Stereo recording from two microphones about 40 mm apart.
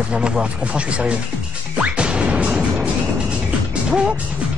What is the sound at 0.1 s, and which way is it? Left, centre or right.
Speech, right.